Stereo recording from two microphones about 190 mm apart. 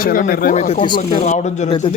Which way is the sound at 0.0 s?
50° left (ahead or behind).